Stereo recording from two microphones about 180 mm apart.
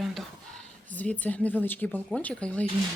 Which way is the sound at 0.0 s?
Centre (ahead or behind).